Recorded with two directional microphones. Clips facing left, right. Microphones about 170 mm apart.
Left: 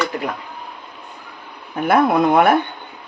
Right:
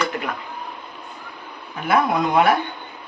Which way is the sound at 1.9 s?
55° left (ahead or behind).